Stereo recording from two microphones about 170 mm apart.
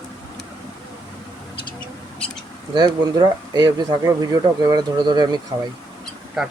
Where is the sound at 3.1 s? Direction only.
25° right (ahead or behind).